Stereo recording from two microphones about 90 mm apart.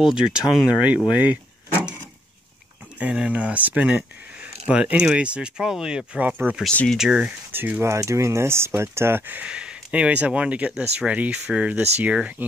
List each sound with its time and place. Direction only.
0.0 s speech: 10° right (ahead or behind)
3.0 s speech: 15° right (ahead or behind)
6.7 s speech: 15° left (ahead or behind)
7.0 s speech: 10° right (ahead or behind)
7.5 s speech: 20° right (ahead or behind)
7.9 s speech: 35° right (ahead or behind); by 12.4 s 15° right (ahead or behind)